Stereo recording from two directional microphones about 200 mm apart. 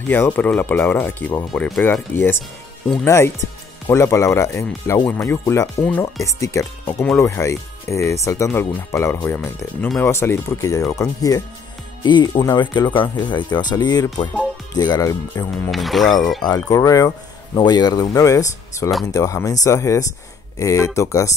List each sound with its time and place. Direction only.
0.1 s speech: 10° left (ahead or behind)
3.8 s speech: 15° left (ahead or behind)
15.7 s speech: centre (ahead or behind)
16.4 s speech: 20° left (ahead or behind)